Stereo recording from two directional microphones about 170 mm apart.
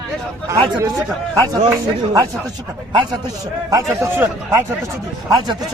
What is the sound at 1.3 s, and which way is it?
Speech, 20° right (ahead or behind).